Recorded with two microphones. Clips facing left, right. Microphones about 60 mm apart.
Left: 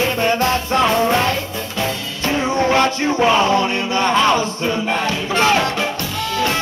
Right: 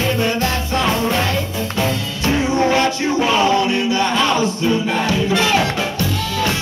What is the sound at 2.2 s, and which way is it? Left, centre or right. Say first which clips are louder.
Music: right 1 dB; left.